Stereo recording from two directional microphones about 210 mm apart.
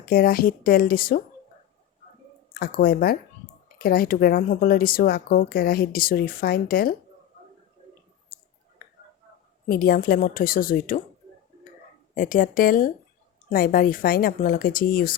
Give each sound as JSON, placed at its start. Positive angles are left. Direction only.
{"t": 0.0, "sound": "speech", "side_deg": 45}
{"t": 2.5, "sound": "speech", "side_deg": 45}
{"t": 8.3, "sound": "a sound", "side_deg": 45}
{"t": 9.6, "sound": "speech", "side_deg": 45}
{"t": 12.1, "sound": "a woman's voice", "side_deg": 40}